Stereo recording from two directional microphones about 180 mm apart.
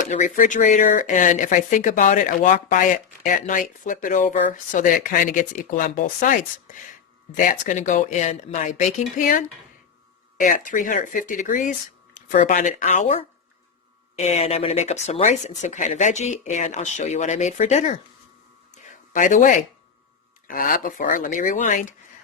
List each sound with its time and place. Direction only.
0.0 s speech: 40° left (ahead or behind)
18.7 s a sound: 45° left (ahead or behind)
20.5 s speech: 50° left (ahead or behind)